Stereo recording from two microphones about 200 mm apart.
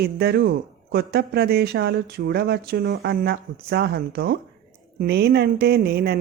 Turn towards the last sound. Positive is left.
turn(degrees=-50)  # may be behind; listen again after turning